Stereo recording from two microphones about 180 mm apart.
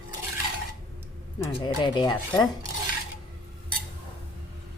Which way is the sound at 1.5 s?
30° left (ahead or behind).